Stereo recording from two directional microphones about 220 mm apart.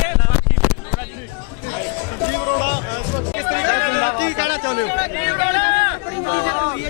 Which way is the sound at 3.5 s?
15° left (ahead or behind).